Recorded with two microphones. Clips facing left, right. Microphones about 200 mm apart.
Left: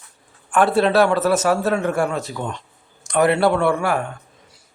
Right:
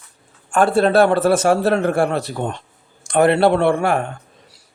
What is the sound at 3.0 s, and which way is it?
A man's voice, 30° right (ahead or behind).